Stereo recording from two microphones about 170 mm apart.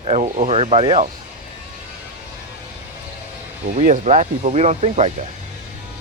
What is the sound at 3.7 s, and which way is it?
Speech, 45° right (ahead or behind).